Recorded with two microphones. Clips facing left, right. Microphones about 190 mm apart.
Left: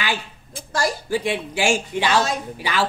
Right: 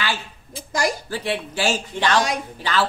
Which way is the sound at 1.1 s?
15° left (ahead or behind).